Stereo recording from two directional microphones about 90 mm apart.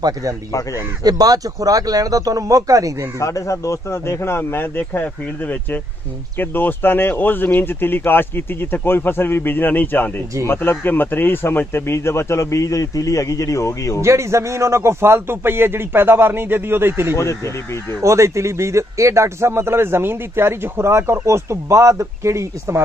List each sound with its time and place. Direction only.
1.0 s speech: 45° right (ahead or behind)
3.2 s speech: 35° left (ahead or behind)
14.0 s a man's voice: 30° right (ahead or behind)
17.1 s speech: 30° left (ahead or behind)
18.0 s a man's voice: 35° right (ahead or behind)